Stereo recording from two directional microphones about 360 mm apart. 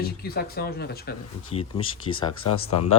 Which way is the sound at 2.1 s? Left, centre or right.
Left.